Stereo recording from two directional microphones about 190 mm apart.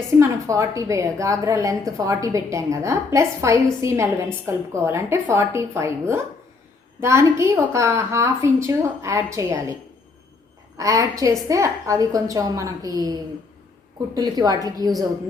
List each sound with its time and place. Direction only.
0.2 s a woman's voice: 15° right (ahead or behind)
10.8 s a woman's voice: 15° right (ahead or behind)